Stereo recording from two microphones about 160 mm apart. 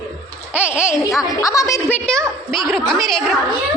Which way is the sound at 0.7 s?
15° left (ahead or behind).